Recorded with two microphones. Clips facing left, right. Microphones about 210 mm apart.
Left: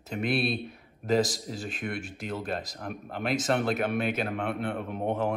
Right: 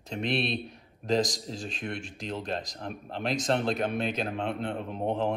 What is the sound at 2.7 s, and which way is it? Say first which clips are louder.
Speech: even; 30° right (ahead or behind).